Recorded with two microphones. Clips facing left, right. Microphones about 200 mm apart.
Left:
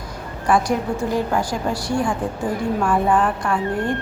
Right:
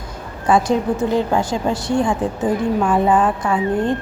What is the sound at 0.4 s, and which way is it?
A woman's voice, 25° right (ahead or behind).